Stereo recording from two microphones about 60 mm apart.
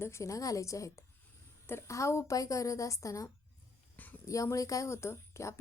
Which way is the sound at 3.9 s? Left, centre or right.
Left.